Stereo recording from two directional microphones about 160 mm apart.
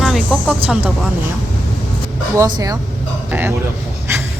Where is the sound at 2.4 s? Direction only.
25° right (ahead or behind).